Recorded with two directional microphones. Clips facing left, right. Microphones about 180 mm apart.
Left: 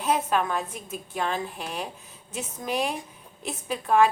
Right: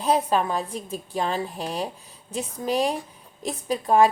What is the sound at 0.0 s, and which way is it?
A woman's voice, 35° right (ahead or behind).